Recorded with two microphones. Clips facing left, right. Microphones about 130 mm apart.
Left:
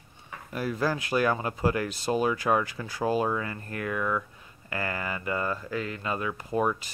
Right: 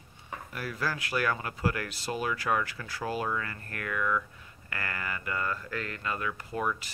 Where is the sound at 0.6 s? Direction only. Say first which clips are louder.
Left 6 dB; 20° left (ahead or behind).